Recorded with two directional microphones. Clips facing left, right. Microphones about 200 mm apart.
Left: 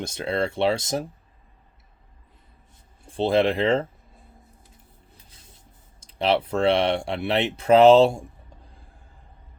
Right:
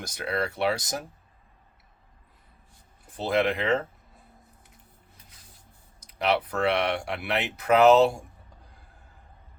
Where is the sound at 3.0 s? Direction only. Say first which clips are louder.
Left 5 dB; 30° left (ahead or behind).